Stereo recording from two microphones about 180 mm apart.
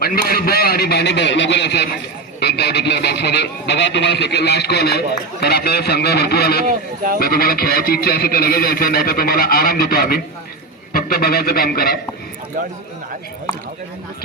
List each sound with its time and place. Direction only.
0.0 s speech: 55° left (ahead or behind)